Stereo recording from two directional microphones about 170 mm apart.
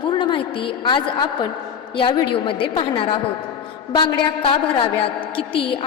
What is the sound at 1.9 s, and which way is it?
A woman's voice, 30° left (ahead or behind).